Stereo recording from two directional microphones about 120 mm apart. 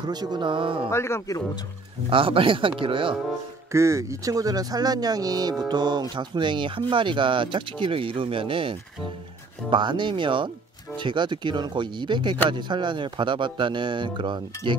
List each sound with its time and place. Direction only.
0.0 s speech: 35° right (ahead or behind)
0.8 s speech: 20° left (ahead or behind)
2.0 s speech: 45° right (ahead or behind)
3.7 s speech: 25° right (ahead or behind)